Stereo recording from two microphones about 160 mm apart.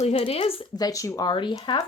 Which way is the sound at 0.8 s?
20° left (ahead or behind).